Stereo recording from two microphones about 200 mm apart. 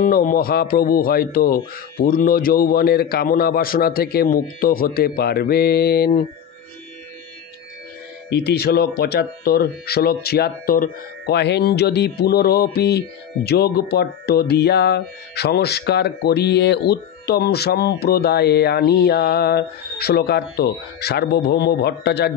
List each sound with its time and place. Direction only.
0.0 s speech: 45° left (ahead or behind)
8.3 s speech: 55° left (ahead or behind)